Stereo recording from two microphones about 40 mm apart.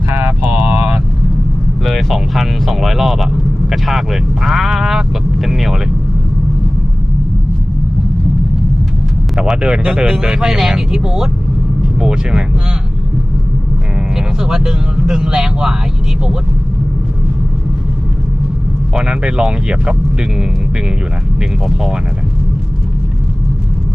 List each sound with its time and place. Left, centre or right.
0.3 s vehicle: right
1.8 s a sound: centre
3.7 s vehicle: centre
9.6 s speech: right
14.2 s speech: centre
19.0 s speech: right